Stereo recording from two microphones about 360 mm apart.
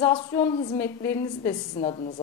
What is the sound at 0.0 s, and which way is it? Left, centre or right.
A woman's voice, centre.